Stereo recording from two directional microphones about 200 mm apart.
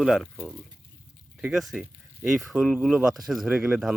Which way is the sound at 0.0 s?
Centre (ahead or behind).